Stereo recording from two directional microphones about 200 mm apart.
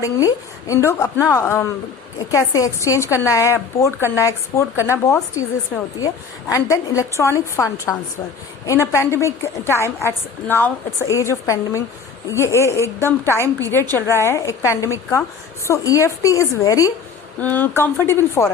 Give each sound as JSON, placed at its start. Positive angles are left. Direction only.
{"t": 0.0, "sound": "a woman's voice", "side_deg": 15}
{"t": 6.5, "sound": "a woman's voice", "side_deg": 15}